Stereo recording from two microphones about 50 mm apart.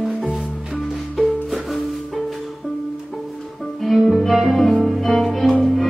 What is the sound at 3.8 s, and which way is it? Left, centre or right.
Music, centre.